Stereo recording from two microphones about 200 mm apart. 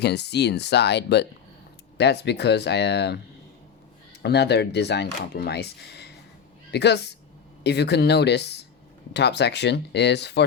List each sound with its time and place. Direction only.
0.0 s speech: 55° left (ahead or behind)
4.2 s speech: 55° left (ahead or behind)